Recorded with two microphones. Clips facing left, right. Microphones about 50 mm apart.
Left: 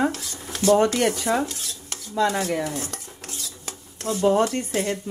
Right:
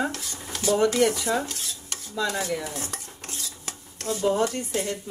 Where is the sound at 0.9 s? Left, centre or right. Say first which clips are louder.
Even; left.